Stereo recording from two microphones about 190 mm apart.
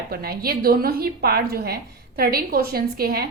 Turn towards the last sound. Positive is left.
turn(degrees=-55)  # may be behind; listen again after turning